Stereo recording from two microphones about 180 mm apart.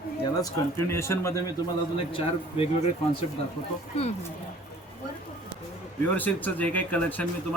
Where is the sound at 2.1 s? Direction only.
30° left (ahead or behind).